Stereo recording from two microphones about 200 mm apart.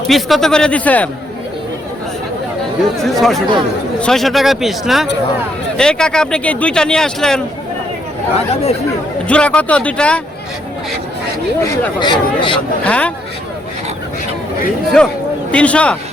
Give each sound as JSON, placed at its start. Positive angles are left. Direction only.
{"t": 0.1, "sound": "speech", "side_deg": 0}
{"t": 3.0, "sound": "speech", "side_deg": 0}
{"t": 9.2, "sound": "speech", "side_deg": 5}
{"t": 11.6, "sound": "speech", "side_deg": 20}
{"t": 12.8, "sound": "speech", "side_deg": 5}
{"t": 15.0, "sound": "speech", "side_deg": 5}